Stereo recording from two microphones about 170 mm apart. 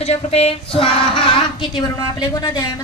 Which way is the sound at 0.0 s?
35° left (ahead or behind).